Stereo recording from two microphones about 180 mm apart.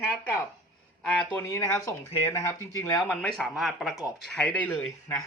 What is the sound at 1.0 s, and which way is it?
Speech, 5° left (ahead or behind).